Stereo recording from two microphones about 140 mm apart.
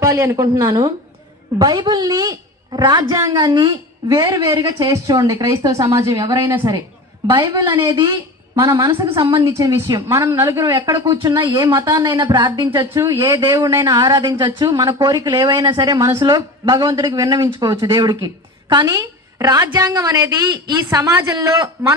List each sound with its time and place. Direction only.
0.0 s a woman's voice: 20° right (ahead or behind)
12.9 s speech: 20° right (ahead or behind)